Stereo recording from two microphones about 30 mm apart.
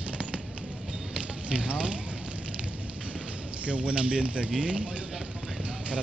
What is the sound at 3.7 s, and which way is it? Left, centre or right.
Speech, right.